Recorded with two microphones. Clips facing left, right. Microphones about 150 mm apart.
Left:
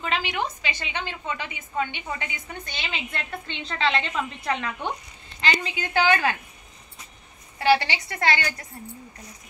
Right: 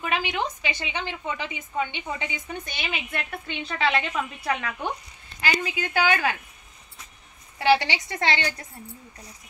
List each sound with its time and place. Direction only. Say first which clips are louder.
0.0 s a woman's voice: even; 15° right (ahead or behind)
7.5 s a woman's voice: even; 15° right (ahead or behind)